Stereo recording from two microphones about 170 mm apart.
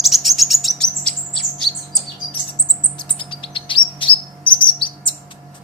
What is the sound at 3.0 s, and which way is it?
Chirp, 30° left (ahead or behind).